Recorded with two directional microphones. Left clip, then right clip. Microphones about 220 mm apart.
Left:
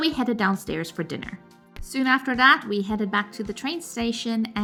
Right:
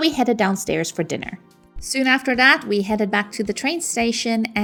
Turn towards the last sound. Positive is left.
turn(degrees=-20)  # may be behind; listen again after turning